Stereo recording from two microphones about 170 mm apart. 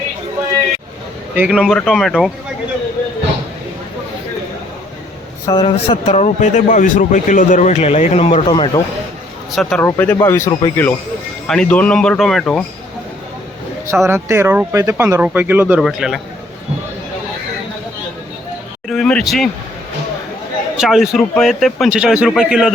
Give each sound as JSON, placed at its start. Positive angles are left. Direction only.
{"t": 1.4, "sound": "speech", "side_deg": -5}
{"t": 5.5, "sound": "speech", "side_deg": 30}
{"t": 9.6, "sound": "speech", "side_deg": 0}
{"t": 13.8, "sound": "speech", "side_deg": -15}
{"t": 18.9, "sound": "speech", "side_deg": 5}
{"t": 20.7, "sound": "speech", "side_deg": 0}